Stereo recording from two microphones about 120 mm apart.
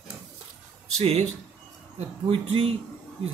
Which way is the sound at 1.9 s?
55° right (ahead or behind).